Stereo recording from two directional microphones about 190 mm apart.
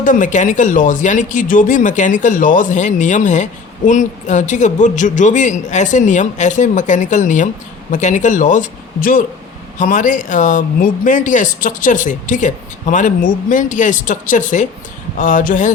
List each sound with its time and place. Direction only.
0.0 s speech: 45° left (ahead or behind)